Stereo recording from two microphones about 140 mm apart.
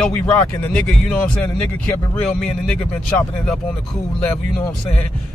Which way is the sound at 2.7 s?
5° left (ahead or behind).